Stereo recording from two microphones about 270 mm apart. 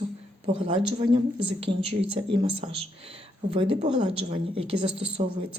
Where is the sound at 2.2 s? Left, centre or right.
Centre.